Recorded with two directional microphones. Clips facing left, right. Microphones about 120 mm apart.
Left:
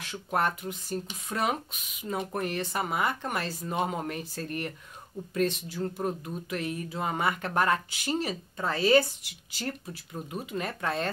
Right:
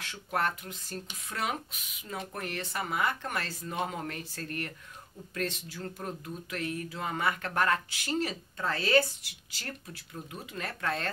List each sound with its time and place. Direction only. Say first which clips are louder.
0.1 s speech: left 3 dB; 15° left (ahead or behind)
10.1 s speech: left 6 dB; 20° left (ahead or behind)